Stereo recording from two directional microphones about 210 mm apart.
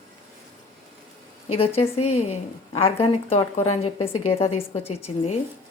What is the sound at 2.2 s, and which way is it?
Speech, 25° left (ahead or behind).